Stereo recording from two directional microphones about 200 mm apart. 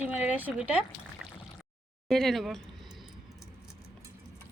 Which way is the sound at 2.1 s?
Centre (ahead or behind).